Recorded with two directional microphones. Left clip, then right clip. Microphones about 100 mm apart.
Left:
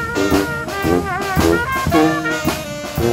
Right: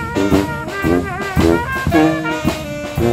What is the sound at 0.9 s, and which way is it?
Music, 20° left (ahead or behind).